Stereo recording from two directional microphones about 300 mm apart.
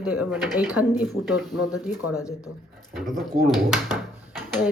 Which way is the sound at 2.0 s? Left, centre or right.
Left.